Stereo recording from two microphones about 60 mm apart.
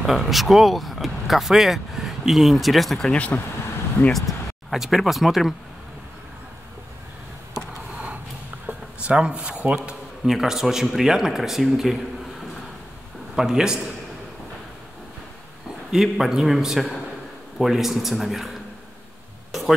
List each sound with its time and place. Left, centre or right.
0.0 s speech: centre
3.1 s speech: left
4.1 s speech: centre
8.6 s a sound: centre
10.2 s a man's voice: centre
13.4 s a man's voice: centre
15.9 s a man's voice: centre